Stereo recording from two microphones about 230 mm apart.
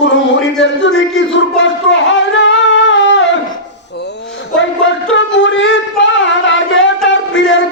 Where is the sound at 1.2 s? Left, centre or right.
Left.